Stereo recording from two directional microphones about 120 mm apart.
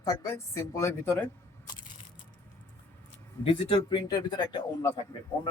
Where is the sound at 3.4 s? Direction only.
45° left (ahead or behind).